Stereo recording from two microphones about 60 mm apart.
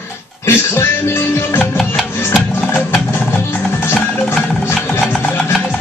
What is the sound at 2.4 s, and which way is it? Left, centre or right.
Music, left.